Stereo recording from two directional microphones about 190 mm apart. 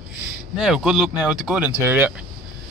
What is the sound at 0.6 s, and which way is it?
Speech, 5° right (ahead or behind).